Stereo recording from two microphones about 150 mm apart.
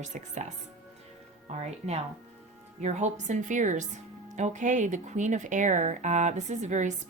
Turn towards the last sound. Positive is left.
turn(degrees=-55)  # may be behind; listen again after turning